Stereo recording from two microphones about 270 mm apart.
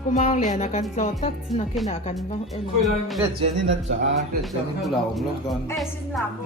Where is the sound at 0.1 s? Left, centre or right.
Left.